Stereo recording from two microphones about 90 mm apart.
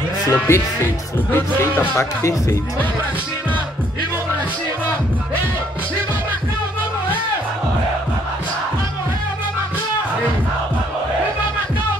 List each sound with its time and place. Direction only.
0.3 s speech: 30° left (ahead or behind)